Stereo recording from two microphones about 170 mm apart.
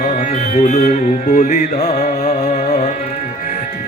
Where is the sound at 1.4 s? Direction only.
40° left (ahead or behind).